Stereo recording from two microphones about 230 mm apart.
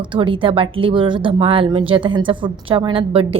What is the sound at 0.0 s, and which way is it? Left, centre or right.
A woman's voice, right.